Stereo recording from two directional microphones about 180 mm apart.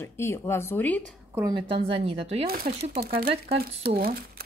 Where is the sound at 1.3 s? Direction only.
25° right (ahead or behind).